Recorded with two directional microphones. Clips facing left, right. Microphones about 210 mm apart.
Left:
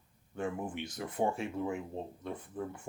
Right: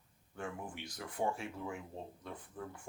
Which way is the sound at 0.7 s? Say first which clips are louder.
Left 7 dB; 20° left (ahead or behind).